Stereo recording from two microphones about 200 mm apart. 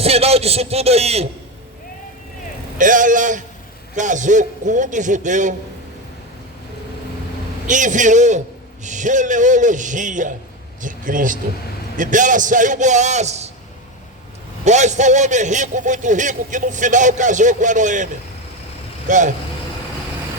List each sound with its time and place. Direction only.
0.0 s a man's voice: 30° right (ahead or behind)
2.7 s a man's voice: 40° right (ahead or behind)
7.7 s a man's voice: 40° right (ahead or behind)
14.6 s a man's voice: 35° right (ahead or behind)